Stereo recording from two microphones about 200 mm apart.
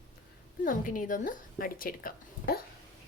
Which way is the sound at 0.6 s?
45° left (ahead or behind).